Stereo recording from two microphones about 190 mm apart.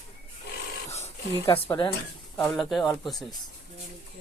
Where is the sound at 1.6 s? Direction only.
20° left (ahead or behind).